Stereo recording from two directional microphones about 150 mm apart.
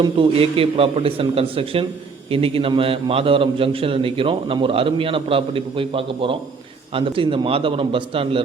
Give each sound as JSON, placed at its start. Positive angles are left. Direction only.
{"t": 0.0, "sound": "a man's voice", "side_deg": -35}